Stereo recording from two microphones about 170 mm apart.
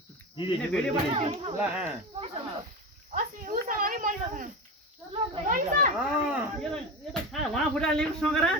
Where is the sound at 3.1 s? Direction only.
50° right (ahead or behind).